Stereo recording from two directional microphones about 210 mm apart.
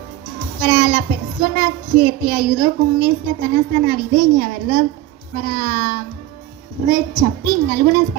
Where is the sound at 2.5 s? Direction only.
45° right (ahead or behind).